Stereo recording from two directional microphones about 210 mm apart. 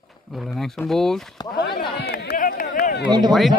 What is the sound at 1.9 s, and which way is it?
Run, 50° left (ahead or behind).